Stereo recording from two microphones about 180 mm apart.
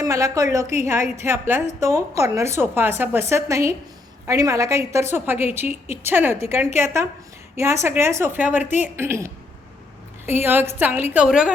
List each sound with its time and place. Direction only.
0.0 s a woman's voice: 20° right (ahead or behind)
10.4 s a woman's voice: 10° right (ahead or behind)